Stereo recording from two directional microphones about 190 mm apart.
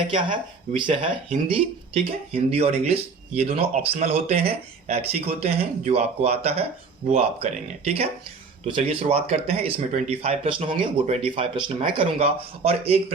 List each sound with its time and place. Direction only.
0.1 s speech: 25° right (ahead or behind)